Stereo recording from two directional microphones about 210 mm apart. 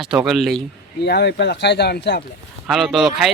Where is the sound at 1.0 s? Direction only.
55° left (ahead or behind).